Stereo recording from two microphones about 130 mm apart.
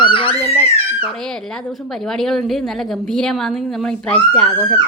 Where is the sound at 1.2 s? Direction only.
5° left (ahead or behind).